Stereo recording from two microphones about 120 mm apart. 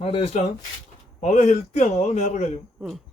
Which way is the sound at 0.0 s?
60° left (ahead or behind).